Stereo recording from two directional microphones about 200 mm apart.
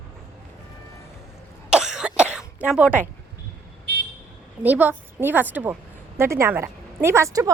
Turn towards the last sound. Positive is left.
turn(degrees=-15)  # may be behind; listen again after turning